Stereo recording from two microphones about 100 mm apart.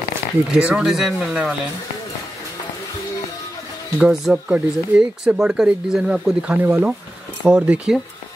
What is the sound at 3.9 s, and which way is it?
Speech, 5° right (ahead or behind).